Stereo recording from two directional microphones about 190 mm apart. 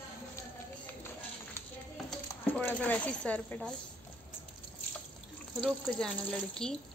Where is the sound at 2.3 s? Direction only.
10° left (ahead or behind).